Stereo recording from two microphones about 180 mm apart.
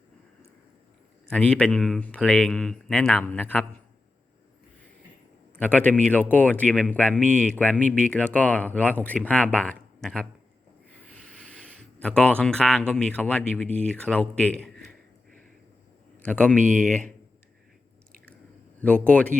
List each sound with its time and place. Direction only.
1.3 s speech: 5° left (ahead or behind)
5.5 s speech: 10° left (ahead or behind)
11.0 s a sound: 5° left (ahead or behind)
12.9 s speech: 5° left (ahead or behind)
16.2 s speech: 5° left (ahead or behind)
18.8 s speech: 5° left (ahead or behind)